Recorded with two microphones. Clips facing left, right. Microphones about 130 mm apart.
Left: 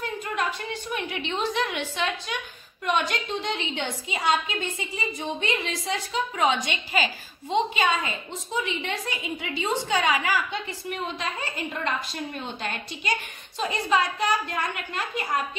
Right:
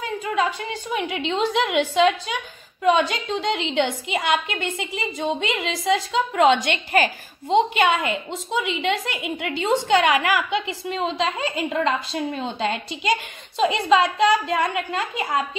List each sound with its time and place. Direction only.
1.0 s a woman's voice: 90° right